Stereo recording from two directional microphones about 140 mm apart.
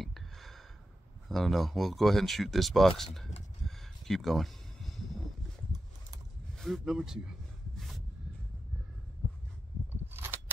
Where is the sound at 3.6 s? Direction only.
Centre (ahead or behind).